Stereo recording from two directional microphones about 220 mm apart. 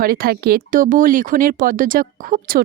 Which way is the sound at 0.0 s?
40° right (ahead or behind).